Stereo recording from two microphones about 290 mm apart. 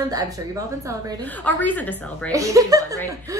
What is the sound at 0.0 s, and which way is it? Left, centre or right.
Speech, centre.